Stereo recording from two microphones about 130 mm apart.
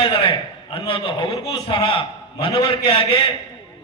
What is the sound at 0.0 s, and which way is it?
A man's voice, 45° left (ahead or behind).